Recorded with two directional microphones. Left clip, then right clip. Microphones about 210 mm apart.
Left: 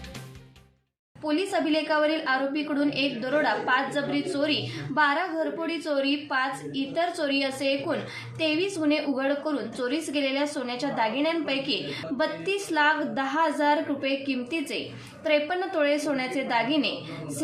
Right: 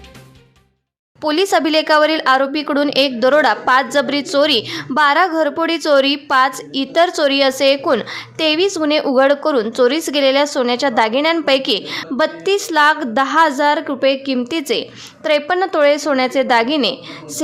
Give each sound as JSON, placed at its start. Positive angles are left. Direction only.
{"t": 1.2, "sound": "speech", "side_deg": -55}